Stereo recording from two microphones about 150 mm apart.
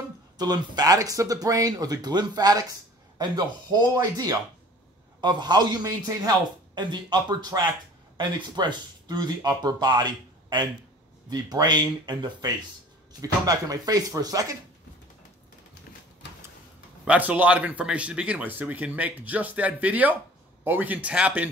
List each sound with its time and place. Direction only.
0.4 s speech: 25° right (ahead or behind)
17.0 s speech: 10° right (ahead or behind)